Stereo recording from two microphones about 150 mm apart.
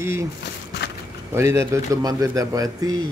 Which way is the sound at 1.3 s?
20° right (ahead or behind).